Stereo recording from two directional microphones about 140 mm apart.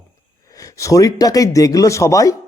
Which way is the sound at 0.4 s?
25° left (ahead or behind).